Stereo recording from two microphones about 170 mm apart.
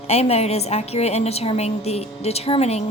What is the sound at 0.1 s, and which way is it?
A woman's voice, 40° left (ahead or behind).